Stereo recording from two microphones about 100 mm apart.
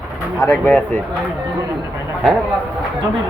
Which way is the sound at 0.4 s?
30° left (ahead or behind).